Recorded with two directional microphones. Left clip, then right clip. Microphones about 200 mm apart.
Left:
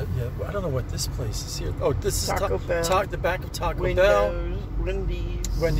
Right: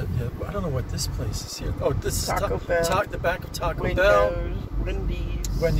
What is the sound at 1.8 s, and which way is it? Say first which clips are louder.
Speech: left 1 dB; 25° left (ahead or behind).